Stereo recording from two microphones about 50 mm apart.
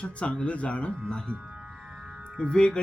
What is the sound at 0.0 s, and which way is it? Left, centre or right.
Speech, left.